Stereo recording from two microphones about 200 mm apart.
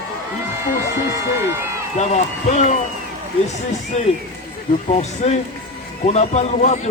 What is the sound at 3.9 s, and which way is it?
A man's voice, 30° left (ahead or behind).